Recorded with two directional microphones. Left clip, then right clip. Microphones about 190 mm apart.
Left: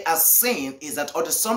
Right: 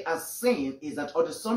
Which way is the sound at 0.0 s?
10° left (ahead or behind).